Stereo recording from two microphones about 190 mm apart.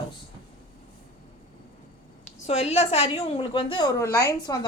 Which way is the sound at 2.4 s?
35° left (ahead or behind).